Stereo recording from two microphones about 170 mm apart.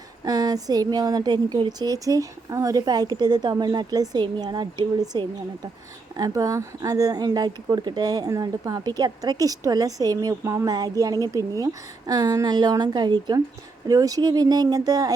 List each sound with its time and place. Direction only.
0.3 s speech: 20° right (ahead or behind)